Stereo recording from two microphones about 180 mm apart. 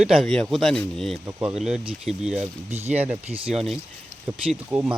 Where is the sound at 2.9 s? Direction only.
10° right (ahead or behind).